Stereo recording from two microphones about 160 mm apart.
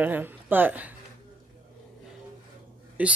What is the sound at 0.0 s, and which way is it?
Speech, 10° right (ahead or behind).